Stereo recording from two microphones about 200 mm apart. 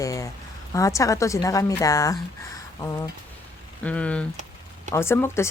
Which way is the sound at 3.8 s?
5° left (ahead or behind).